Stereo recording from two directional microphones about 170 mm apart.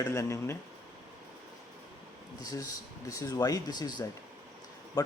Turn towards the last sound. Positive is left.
turn(degrees=20)  # may be behind; listen again after turning